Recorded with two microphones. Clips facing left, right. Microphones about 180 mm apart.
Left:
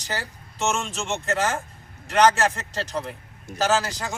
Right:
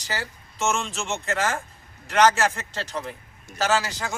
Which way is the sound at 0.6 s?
Centre (ahead or behind).